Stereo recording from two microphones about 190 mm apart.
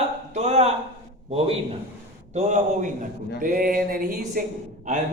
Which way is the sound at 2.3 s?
40° right (ahead or behind).